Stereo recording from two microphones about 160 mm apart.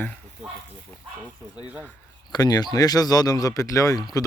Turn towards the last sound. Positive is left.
turn(degrees=20)  # may be behind; listen again after turning